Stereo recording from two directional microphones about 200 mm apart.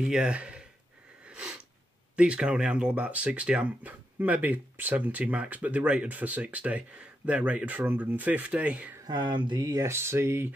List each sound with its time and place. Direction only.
0.0 s speech: 5° right (ahead or behind)
1.2 s sniff: 5° right (ahead or behind)
2.1 s speech: 5° right (ahead or behind)
9.0 s speech: 20° right (ahead or behind)